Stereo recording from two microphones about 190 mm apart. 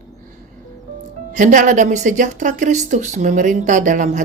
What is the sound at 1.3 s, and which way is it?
A woman's voice, 40° right (ahead or behind).